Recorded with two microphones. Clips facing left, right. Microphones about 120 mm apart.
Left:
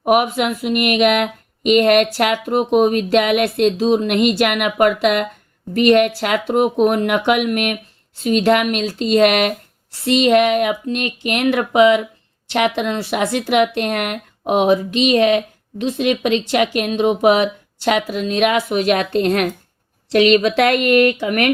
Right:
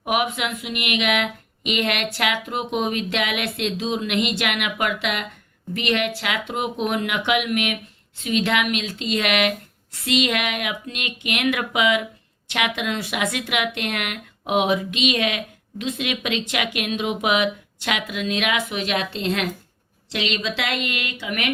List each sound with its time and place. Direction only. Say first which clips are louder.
0.0 s speech: left 8 dB; 40° left (ahead or behind)